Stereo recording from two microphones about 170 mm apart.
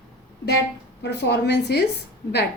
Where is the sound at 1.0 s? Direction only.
80° left.